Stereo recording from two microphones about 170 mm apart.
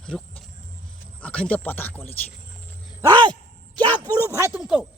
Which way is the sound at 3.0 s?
25° right (ahead or behind).